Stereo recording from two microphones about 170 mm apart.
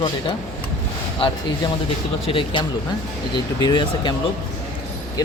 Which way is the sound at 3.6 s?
25° left (ahead or behind).